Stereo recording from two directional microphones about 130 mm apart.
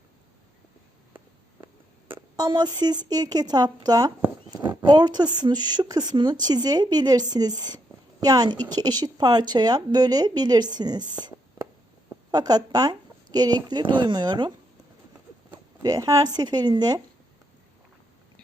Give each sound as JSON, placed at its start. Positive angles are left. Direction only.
{"t": 2.3, "sound": "a woman's voice", "side_deg": -35}
{"t": 15.8, "sound": "speech", "side_deg": -25}